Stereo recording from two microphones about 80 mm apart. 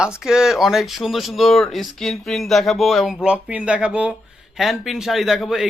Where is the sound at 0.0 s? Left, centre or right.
Centre.